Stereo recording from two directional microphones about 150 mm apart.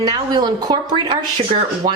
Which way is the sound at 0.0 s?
25° right (ahead or behind).